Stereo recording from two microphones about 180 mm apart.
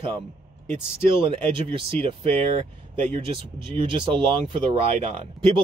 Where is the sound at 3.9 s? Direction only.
30° right (ahead or behind).